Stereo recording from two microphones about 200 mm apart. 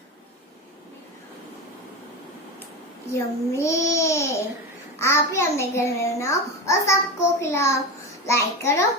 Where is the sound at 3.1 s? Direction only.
15° left (ahead or behind).